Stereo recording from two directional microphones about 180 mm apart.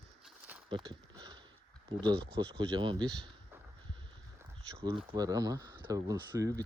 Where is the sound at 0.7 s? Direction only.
25° right (ahead or behind).